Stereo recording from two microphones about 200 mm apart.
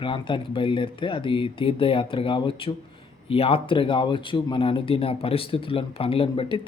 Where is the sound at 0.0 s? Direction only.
25° left (ahead or behind).